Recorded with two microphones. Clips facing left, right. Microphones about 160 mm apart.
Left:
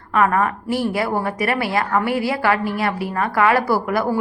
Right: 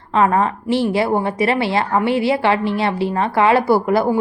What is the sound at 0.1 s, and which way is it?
A woman's voice, 25° right (ahead or behind).